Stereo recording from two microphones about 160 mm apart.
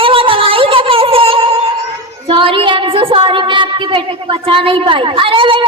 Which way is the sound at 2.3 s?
35° right (ahead or behind).